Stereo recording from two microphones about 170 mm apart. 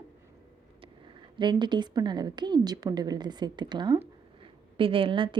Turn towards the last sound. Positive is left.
turn(degrees=-30)  # may be behind; listen again after turning